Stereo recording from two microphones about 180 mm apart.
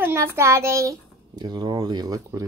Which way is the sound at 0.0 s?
15° right (ahead or behind).